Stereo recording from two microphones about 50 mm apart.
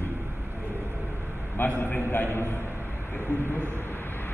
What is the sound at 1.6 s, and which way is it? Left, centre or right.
Speech, left.